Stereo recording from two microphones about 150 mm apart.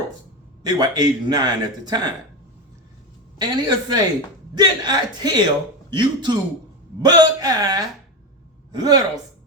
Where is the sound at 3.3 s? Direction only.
30° right (ahead or behind).